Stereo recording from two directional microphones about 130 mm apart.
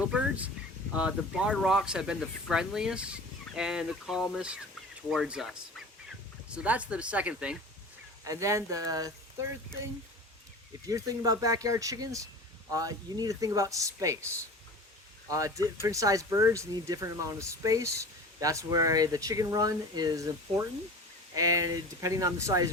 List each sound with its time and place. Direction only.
0.0 s a sound: 10° right (ahead or behind)
0.9 s speech: 10° right (ahead or behind)
8.2 s speech: 25° right (ahead or behind)
10.8 s speech: 25° right (ahead or behind)
15.3 s speech: 25° right (ahead or behind)